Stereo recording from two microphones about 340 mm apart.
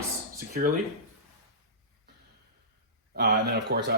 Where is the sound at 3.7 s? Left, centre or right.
Right.